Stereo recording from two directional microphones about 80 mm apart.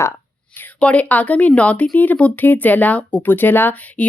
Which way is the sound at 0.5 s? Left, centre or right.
Centre.